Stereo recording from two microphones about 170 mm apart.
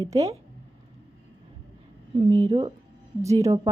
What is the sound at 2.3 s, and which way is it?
Speech, 30° right (ahead or behind).